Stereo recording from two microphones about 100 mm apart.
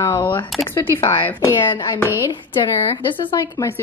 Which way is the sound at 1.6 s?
50° left (ahead or behind).